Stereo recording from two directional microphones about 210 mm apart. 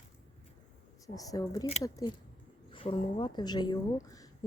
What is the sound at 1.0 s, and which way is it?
Speech, 15° left (ahead or behind).